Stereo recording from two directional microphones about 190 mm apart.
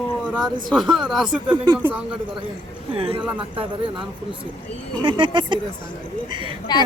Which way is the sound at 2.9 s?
30° right (ahead or behind).